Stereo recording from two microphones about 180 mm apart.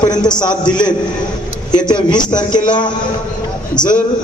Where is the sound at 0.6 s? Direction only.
25° left (ahead or behind).